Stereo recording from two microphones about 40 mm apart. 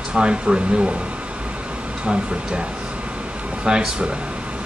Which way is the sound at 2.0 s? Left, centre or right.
Right.